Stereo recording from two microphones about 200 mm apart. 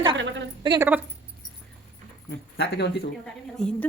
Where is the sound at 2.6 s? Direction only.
55° left (ahead or behind).